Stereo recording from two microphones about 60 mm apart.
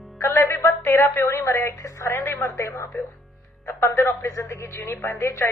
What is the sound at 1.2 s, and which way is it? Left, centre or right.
A woman's voice, left.